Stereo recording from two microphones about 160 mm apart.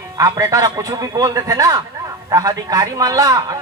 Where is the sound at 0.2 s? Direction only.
25° right (ahead or behind).